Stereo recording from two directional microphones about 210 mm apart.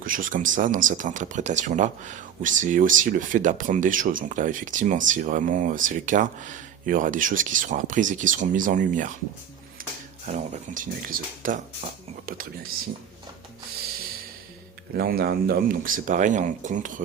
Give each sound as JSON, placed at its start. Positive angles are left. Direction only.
{"t": 0.0, "sound": "speech", "side_deg": -40}
{"t": 10.2, "sound": "speech", "side_deg": -35}
{"t": 14.9, "sound": "speech", "side_deg": -45}